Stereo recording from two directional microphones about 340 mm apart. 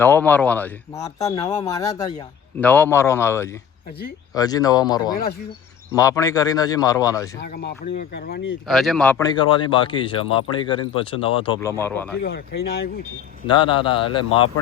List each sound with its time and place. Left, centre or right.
0.0 s speech: centre
7.4 s speech: left
8.6 s speech: centre
12.2 s speech: left
13.5 s speech: centre